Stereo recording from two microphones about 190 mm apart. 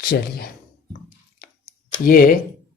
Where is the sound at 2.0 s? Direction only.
50° left (ahead or behind).